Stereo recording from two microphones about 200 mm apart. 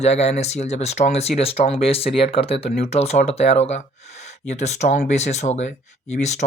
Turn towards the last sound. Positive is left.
turn(degrees=35)  # may be behind; listen again after turning